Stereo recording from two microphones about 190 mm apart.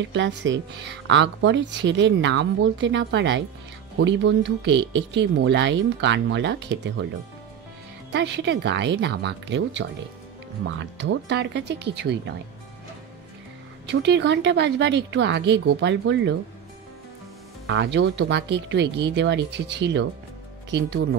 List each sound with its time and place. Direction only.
0.0 s speech: 70° right (ahead or behind)
8.1 s speech: 65° right (ahead or behind)
13.8 s speech: 65° right (ahead or behind)
17.6 s speech: 70° right (ahead or behind)